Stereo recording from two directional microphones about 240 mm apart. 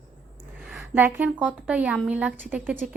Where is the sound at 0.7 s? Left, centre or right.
Centre.